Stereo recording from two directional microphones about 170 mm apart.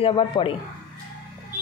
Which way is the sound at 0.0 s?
30° left (ahead or behind).